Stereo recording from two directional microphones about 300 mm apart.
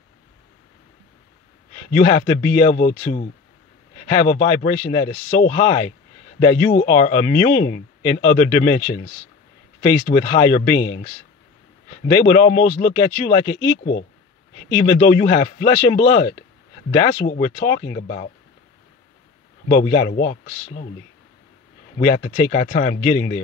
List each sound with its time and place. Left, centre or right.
1.9 s speech: left
12.2 s speech: left
14.8 s speech: left
19.7 s speech: left
21.9 s speech: left